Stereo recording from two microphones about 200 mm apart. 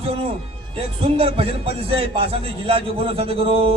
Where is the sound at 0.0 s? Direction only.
30° right (ahead or behind).